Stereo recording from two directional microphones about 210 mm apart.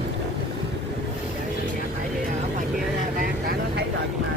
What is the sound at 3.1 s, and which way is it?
Vehicle, 45° right (ahead or behind).